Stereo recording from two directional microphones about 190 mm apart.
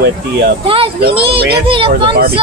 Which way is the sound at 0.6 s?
30° right (ahead or behind).